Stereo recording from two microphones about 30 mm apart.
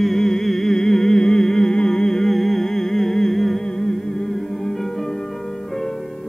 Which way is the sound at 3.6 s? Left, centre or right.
Left.